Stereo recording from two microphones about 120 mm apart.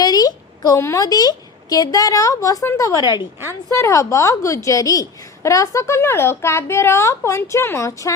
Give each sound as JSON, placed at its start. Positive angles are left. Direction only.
{"t": 0.0, "sound": "a woman's voice", "side_deg": 30}